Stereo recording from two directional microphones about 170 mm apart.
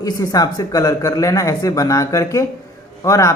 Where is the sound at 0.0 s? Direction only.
20° left (ahead or behind).